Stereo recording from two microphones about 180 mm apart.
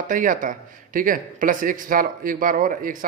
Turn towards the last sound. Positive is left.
turn(degrees=-50)  # may be behind; listen again after turning